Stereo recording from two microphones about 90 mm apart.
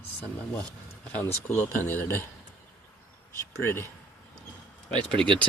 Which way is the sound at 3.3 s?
25° left (ahead or behind).